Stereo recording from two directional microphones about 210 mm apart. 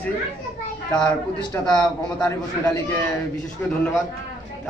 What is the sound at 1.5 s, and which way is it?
Speech, 10° left (ahead or behind).